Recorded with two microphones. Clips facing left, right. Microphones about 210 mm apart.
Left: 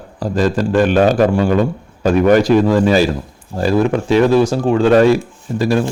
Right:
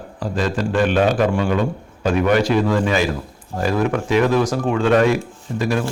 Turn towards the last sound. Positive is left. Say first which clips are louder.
# left 5 dB
turn(degrees=35)  # may be behind; listen again after turning